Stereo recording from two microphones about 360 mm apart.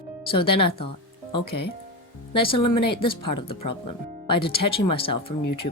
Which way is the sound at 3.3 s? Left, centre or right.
Left.